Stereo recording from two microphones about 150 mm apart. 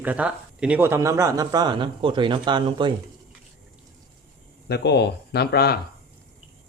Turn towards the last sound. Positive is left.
turn(degrees=90)